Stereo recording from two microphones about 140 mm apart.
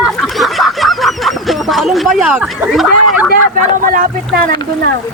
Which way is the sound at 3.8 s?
90° right.